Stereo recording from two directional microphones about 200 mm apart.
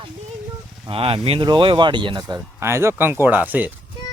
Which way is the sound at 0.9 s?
30° right (ahead or behind).